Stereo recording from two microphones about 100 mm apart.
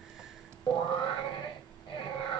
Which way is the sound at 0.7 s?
55° left (ahead or behind).